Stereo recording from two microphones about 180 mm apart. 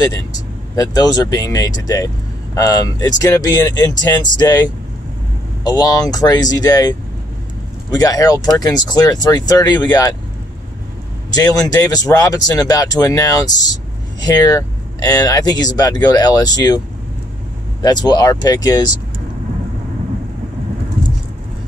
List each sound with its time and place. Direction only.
0.7 s speech: 20° left (ahead or behind)
11.3 s speech: 20° left (ahead or behind)
17.8 s speech: 20° left (ahead or behind)